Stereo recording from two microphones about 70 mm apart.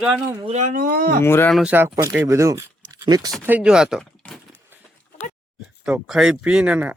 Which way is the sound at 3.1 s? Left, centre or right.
Right.